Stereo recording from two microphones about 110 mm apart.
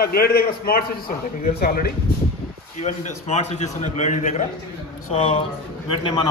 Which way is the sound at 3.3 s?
90° left.